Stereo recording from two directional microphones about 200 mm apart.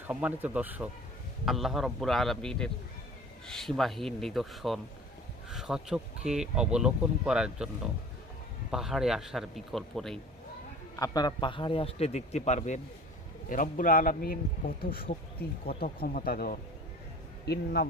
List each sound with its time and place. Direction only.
0.1 s speech: 10° right (ahead or behind)
8.7 s speech: centre (ahead or behind)
10.9 s a man's voice: 20° left (ahead or behind); by 17.8 s 55° left (ahead or behind)